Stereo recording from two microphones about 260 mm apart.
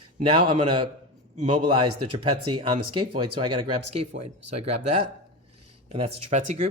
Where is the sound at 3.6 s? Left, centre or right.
Right.